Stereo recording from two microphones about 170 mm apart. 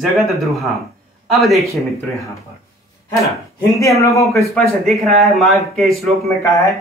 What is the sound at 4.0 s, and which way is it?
Speech, 15° left (ahead or behind).